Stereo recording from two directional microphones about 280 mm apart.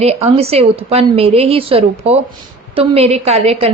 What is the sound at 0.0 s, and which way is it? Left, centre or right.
A woman's voice, right.